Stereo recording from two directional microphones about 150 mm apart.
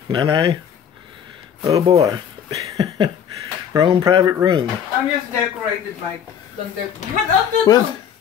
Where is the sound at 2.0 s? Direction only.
20° right (ahead or behind).